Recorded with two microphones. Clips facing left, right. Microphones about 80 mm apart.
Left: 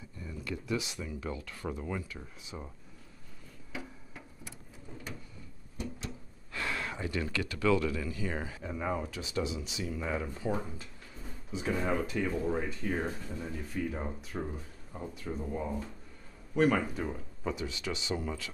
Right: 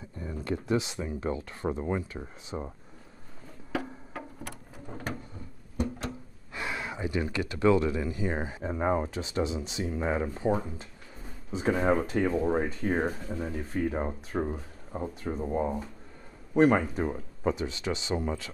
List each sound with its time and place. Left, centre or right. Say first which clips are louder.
0.2 s speech: right 7 dB; right
3.7 s a sound: right 10 dB; right
5.8 s music: right 8 dB; right
6.5 s speech: right 1 dB; centre
8.7 s speech: right 7 dB; right